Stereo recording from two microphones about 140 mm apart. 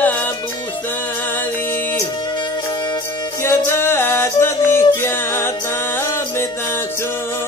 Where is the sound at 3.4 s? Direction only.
15° left (ahead or behind).